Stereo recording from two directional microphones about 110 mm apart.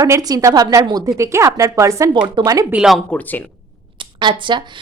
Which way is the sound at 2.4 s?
45° right (ahead or behind).